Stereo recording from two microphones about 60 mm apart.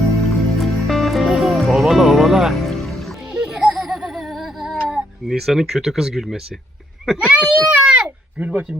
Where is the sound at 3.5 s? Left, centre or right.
Centre.